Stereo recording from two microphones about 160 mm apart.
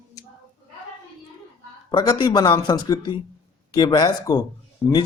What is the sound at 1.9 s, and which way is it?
Speech, 30° left (ahead or behind).